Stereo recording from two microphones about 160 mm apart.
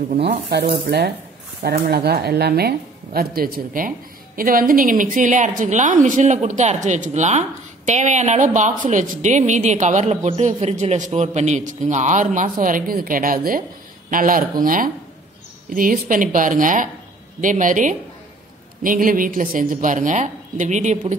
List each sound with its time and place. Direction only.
0.3 s speech: 90° right
1.6 s a woman's voice: 75° right (ahead or behind); by 21.2 s 45° right (ahead or behind)